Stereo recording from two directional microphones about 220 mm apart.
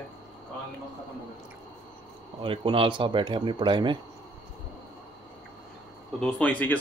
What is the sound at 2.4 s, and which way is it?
Speech, 25° right (ahead or behind).